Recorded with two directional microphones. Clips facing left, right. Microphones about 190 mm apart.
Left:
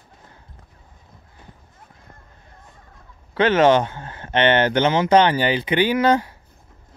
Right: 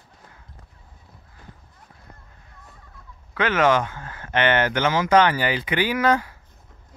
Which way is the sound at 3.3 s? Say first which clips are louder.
Left 5 dB; 30° left (ahead or behind).